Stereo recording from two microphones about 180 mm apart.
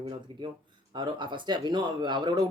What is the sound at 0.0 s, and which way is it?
Speech, 25° right (ahead or behind).